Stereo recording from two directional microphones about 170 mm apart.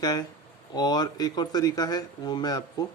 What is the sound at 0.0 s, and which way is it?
Speech, 25° left (ahead or behind).